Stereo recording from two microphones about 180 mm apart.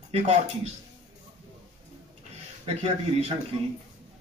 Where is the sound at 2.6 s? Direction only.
35° right (ahead or behind).